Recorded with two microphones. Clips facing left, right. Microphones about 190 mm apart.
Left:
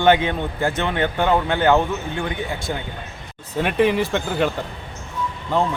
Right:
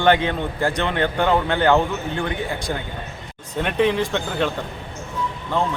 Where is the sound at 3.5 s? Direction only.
5° left (ahead or behind).